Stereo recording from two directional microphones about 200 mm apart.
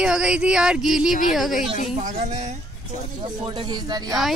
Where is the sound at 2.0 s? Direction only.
35° right (ahead or behind).